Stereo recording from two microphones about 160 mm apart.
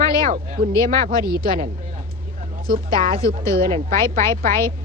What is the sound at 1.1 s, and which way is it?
Speech, 25° left (ahead or behind).